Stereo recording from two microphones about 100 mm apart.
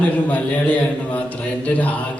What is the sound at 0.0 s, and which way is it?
A man's voice, 15° left (ahead or behind).